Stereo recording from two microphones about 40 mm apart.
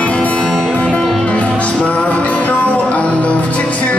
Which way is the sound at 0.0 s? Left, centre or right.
Left.